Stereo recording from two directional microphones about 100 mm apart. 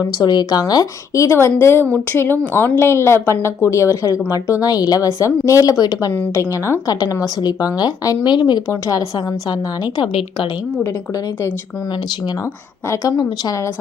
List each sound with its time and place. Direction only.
0.0 s a woman's voice: 45° left (ahead or behind)
12.9 s a woman's voice: 35° left (ahead or behind)